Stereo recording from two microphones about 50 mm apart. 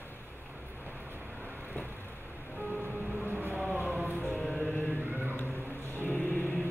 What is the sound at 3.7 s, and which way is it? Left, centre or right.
Music, right.